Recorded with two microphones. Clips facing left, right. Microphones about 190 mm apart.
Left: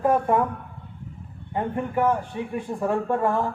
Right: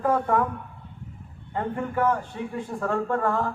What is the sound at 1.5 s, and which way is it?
Speech, 20° left (ahead or behind).